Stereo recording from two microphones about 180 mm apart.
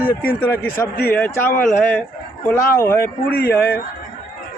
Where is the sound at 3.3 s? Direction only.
60° left (ahead or behind).